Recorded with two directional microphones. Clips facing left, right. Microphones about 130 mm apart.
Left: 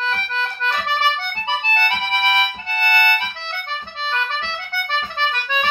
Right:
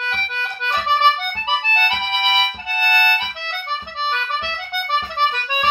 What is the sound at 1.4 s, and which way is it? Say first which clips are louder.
Music: even; 15° right (ahead or behind).